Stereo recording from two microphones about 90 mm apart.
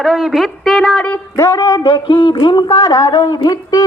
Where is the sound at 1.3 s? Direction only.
35° left (ahead or behind).